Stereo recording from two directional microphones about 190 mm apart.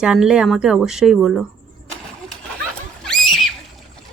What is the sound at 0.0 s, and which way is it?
Speech, 5° right (ahead or behind).